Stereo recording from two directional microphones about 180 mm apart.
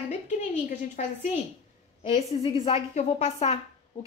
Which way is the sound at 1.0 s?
35° left (ahead or behind).